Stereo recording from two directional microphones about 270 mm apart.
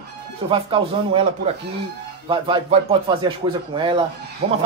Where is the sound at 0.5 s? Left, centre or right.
Centre.